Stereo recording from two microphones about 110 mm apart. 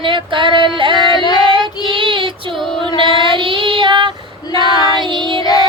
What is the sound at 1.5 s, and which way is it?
Child singing, 50° right (ahead or behind).